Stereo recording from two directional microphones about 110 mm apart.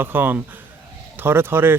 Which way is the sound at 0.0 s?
20° right (ahead or behind).